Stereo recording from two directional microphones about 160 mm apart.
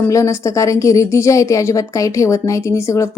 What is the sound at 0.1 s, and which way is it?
A woman's voice, 20° left (ahead or behind).